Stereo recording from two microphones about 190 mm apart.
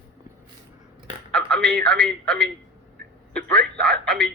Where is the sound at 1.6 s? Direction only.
50° right (ahead or behind).